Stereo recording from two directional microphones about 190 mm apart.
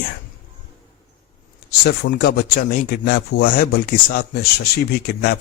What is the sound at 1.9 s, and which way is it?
Speech, 50° left (ahead or behind).